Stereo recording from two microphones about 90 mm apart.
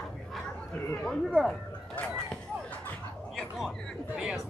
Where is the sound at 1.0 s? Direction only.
Centre (ahead or behind).